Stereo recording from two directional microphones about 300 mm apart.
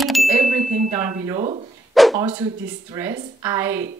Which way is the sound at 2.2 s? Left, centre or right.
Centre.